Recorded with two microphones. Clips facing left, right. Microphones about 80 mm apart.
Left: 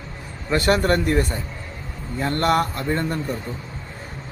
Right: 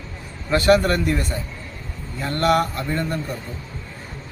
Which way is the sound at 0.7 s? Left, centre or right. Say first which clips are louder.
Right 2 dB; left.